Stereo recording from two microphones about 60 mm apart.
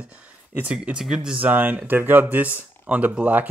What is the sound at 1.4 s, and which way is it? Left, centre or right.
Speech, right.